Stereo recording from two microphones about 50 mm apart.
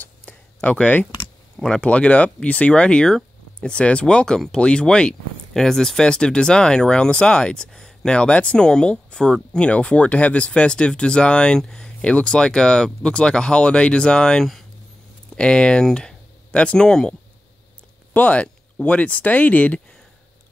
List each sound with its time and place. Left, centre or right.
0.0 s a sound: left
0.7 s speech: left
1.6 s speech: centre
1.9 s speech: left
8.2 s speech: left
18.1 s speech: left